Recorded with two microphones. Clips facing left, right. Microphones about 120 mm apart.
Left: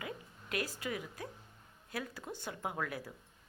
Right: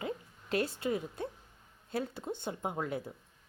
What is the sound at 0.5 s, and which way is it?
Speech, 30° right (ahead or behind).